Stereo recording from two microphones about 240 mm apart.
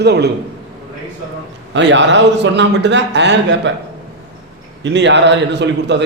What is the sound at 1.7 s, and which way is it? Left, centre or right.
A man's voice, right.